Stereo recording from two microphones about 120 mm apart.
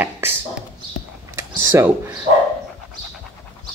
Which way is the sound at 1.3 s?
20° right (ahead or behind).